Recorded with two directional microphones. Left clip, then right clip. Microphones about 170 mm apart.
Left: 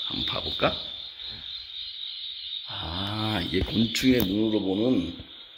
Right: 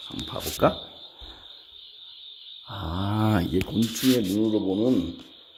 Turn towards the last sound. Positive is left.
turn(degrees=-5)  # may be behind; listen again after turning